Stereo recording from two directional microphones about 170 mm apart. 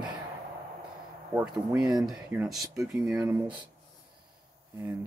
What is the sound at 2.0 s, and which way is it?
Speech, 5° right (ahead or behind).